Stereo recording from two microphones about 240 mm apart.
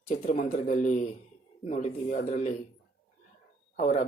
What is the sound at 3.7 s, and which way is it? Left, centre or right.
Speech, left.